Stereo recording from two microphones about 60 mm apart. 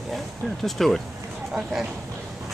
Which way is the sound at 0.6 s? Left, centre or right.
Centre.